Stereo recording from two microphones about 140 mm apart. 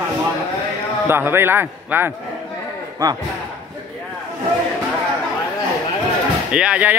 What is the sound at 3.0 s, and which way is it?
Speech, 25° right (ahead or behind).